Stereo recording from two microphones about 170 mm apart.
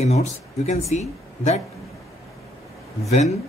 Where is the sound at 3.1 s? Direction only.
40° left (ahead or behind).